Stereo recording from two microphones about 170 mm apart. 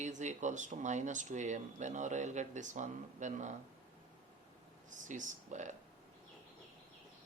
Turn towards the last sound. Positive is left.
turn(degrees=-45)  # may be behind; listen again after turning